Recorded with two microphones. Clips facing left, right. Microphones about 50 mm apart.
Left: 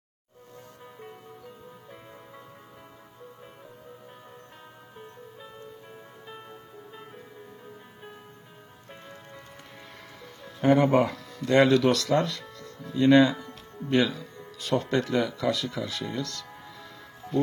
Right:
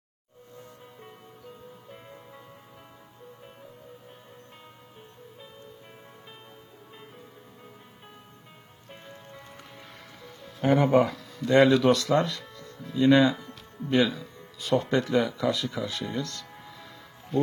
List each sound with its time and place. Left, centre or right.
10.6 s speech: centre
12.3 s music: centre
12.9 s speech: centre
15.4 s speech: centre
16.0 s speech: centre
16.4 s music: centre